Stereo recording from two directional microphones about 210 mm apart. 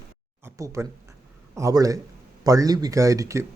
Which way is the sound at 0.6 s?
15° right (ahead or behind).